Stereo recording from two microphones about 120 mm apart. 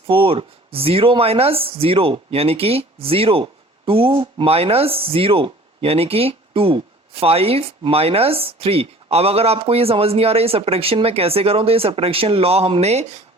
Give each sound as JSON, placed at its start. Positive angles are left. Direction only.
{"t": 0.1, "sound": "speech", "side_deg": -50}